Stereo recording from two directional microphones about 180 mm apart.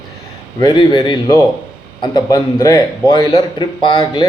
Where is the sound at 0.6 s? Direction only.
25° left (ahead or behind).